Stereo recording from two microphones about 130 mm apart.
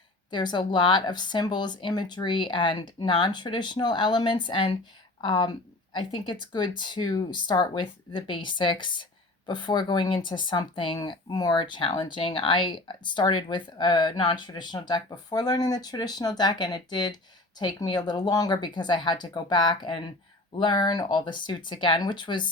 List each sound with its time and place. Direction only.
0.3 s speech: 35° left (ahead or behind)